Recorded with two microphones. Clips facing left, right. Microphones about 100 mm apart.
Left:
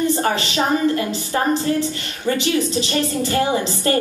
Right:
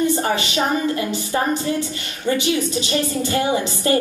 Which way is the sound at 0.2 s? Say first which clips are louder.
Left 1 dB; 20° right (ahead or behind).